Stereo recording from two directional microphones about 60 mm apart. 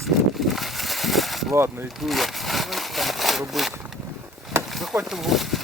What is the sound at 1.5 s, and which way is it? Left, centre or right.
Speech, right.